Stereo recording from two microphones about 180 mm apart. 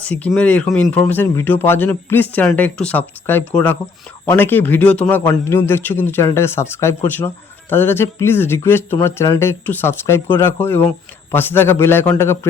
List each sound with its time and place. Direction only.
0.0 s a man's voice: 5° left (ahead or behind)